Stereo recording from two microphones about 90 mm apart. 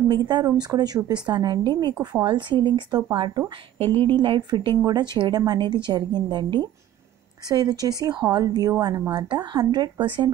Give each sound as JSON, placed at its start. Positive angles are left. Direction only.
{"t": 0.1, "sound": "a woman's voice", "side_deg": -55}
{"t": 3.2, "sound": "a woman's voice", "side_deg": -65}
{"t": 10.0, "sound": "speech", "side_deg": -70}